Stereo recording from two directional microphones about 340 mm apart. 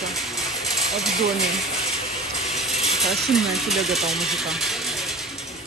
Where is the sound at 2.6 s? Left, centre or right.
Centre.